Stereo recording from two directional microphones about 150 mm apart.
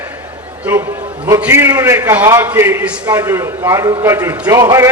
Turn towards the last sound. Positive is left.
turn(degrees=-20)  # may be behind; listen again after turning